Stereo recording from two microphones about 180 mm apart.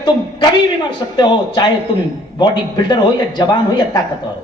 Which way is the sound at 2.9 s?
25° left (ahead or behind).